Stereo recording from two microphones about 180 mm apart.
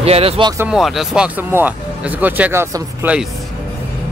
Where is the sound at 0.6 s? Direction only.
5° right (ahead or behind).